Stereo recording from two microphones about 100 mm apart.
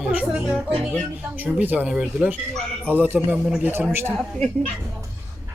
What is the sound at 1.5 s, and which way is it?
A man's voice, 15° right (ahead or behind).